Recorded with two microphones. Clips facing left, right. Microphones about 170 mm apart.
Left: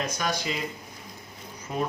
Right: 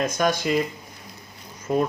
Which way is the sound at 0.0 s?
50° right (ahead or behind).